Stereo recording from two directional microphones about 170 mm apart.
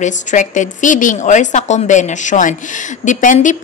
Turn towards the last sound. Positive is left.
turn(degrees=50)  # may be behind; listen again after turning